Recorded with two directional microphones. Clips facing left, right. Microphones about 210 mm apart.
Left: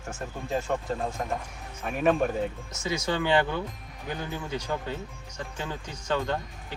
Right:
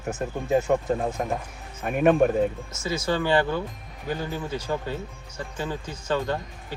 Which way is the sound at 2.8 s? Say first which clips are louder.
Right 2 dB; centre (ahead or behind).